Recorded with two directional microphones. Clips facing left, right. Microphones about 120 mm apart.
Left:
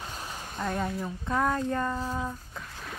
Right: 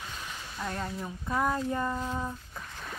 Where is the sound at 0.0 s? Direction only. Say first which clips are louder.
Left 3 dB; 35° left (ahead or behind).